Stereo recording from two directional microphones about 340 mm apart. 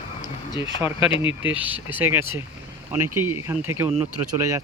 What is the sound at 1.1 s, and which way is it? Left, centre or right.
Speech, centre.